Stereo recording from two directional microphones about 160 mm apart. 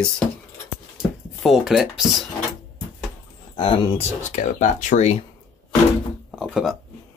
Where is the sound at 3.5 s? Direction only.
35° left (ahead or behind).